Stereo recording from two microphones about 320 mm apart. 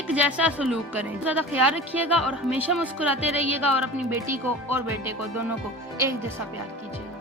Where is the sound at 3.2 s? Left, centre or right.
Centre.